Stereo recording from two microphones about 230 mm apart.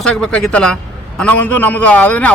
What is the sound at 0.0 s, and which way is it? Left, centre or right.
A man's voice, centre.